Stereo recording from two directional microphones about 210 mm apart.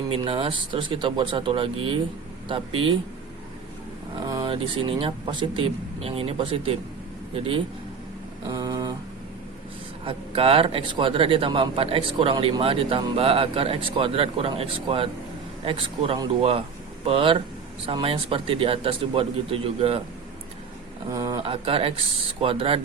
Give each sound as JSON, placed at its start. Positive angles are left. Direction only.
{"t": 0.1, "sound": "speech", "side_deg": -25}
{"t": 4.3, "sound": "speech", "side_deg": -20}
{"t": 8.4, "sound": "a sound", "side_deg": -20}
{"t": 10.0, "sound": "speech", "side_deg": -25}
{"t": 21.1, "sound": "speech", "side_deg": -15}